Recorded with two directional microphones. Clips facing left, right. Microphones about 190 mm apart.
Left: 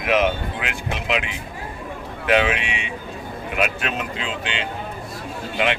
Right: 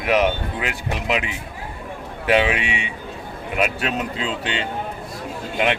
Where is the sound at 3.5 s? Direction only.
40° right (ahead or behind).